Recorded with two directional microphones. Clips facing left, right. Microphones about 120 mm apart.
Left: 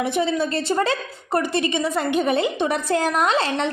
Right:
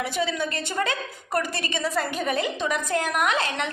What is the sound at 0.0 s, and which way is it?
A woman's voice, 25° left (ahead or behind).